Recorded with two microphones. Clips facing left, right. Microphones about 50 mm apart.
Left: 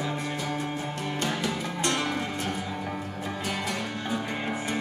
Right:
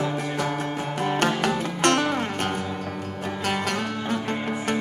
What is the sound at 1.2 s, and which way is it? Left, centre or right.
Music, right.